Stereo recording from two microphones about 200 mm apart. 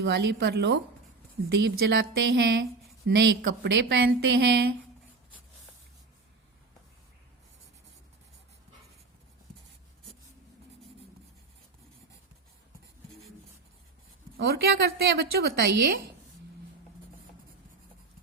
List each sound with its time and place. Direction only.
0.0 s a woman's voice: 60° right (ahead or behind)
14.3 s a woman's voice: 50° right (ahead or behind)